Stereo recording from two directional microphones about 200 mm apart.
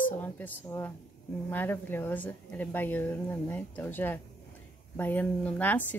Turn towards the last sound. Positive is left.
turn(degrees=10)  # may be behind; listen again after turning